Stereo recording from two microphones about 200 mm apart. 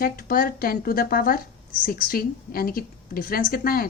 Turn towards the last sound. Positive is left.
turn(degrees=45)  # may be behind; listen again after turning